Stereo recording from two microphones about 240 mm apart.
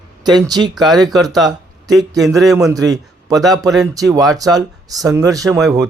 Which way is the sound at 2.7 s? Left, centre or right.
Centre.